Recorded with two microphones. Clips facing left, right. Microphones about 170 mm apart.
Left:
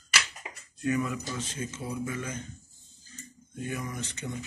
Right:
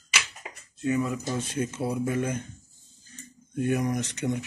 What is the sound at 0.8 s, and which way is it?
Speech, 25° right (ahead or behind).